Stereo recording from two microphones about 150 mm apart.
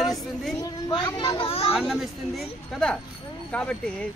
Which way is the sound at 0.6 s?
25° left (ahead or behind).